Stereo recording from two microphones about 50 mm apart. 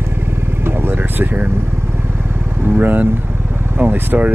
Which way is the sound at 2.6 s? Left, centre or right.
Right.